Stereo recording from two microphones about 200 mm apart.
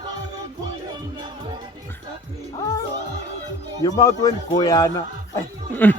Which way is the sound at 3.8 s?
15° left (ahead or behind).